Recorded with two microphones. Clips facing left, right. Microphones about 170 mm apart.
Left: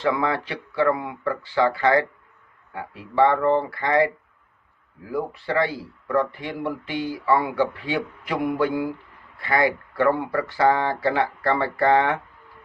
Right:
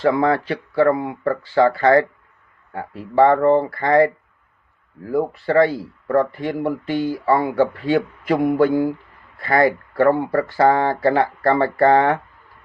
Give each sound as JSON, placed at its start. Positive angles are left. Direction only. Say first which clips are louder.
{"t": 0.0, "sound": "speech", "louder": "right 6 dB", "side_deg": -45}
{"t": 9.4, "sound": "speech", "louder": "right 5 dB", "side_deg": -45}